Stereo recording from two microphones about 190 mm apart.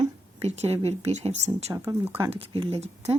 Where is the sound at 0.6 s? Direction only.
35° right (ahead or behind).